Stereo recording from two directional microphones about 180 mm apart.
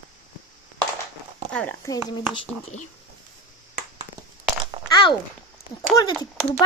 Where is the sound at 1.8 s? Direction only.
25° left (ahead or behind).